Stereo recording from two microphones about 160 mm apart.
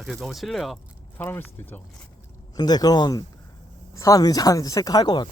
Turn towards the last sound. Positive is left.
turn(degrees=25)  # may be behind; listen again after turning